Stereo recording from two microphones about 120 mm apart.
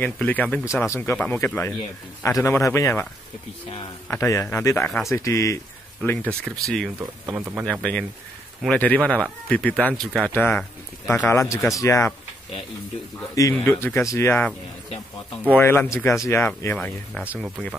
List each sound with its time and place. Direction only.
0.0 s speech: 15° left (ahead or behind)
0.8 s a man's voice: 25° left (ahead or behind)
4.1 s a man's voice: 25° left (ahead or behind)
4.8 s speech: 5° left (ahead or behind)
5.1 s a man's voice: 25° left (ahead or behind)
6.0 s speech: 15° left (ahead or behind)
7.3 s speech: 15° right (ahead or behind)
7.6 s speech: 10° left (ahead or behind)
11.2 s a man's voice: 25° left (ahead or behind)
13.3 s a man's voice: 30° left (ahead or behind)
15.5 s a man's voice: 15° left (ahead or behind)
16.7 s speech: 10° left (ahead or behind)